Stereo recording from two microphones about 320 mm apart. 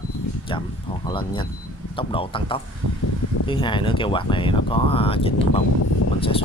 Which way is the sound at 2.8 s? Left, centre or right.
Right.